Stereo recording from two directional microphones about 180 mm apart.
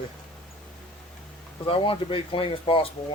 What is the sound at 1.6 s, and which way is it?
Speech, 30° left (ahead or behind).